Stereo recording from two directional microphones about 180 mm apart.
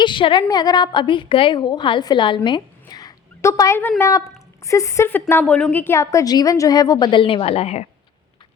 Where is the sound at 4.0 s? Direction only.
20° left (ahead or behind); by 7.8 s 35° left (ahead or behind).